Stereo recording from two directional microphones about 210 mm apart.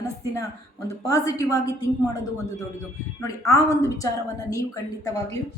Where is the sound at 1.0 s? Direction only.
15° left (ahead or behind).